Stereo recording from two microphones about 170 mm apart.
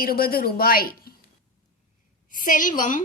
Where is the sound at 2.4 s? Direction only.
50° left (ahead or behind).